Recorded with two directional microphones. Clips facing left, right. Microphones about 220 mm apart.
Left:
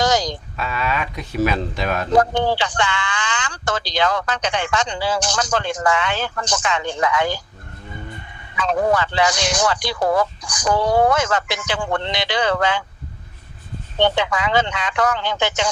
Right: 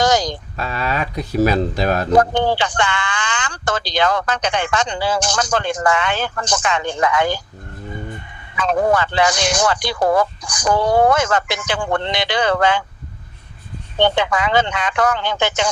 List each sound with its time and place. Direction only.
0.0 s speech: 50° right (ahead or behind); by 2.0 s 35° right (ahead or behind)
2.1 s a man's voice: 55° right (ahead or behind)
8.5 s a man's voice: 50° right (ahead or behind)
14.0 s a man's voice: 50° right (ahead or behind)